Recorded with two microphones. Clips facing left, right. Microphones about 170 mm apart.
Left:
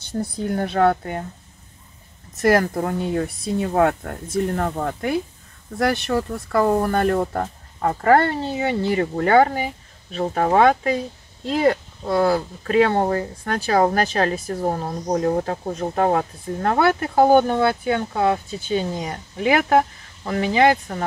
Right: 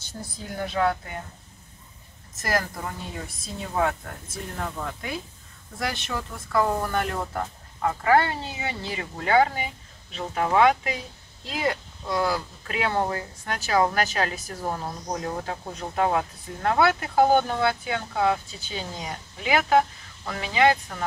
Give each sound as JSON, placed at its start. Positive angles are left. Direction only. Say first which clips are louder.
{"t": 0.4, "sound": "speech", "louder": "left 6 dB", "side_deg": 60}
{"t": 2.7, "sound": "speech", "louder": "left 12 dB", "side_deg": 55}
{"t": 6.5, "sound": "speech", "louder": "left 5 dB", "side_deg": 40}
{"t": 14.5, "sound": "speech", "louder": "left 7 dB", "side_deg": 45}